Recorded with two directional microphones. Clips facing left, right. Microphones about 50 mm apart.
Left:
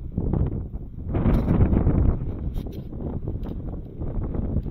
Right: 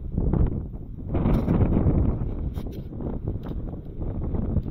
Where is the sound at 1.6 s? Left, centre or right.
Centre.